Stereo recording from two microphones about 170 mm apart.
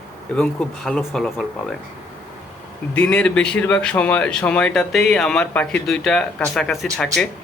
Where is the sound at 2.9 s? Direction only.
5° left (ahead or behind).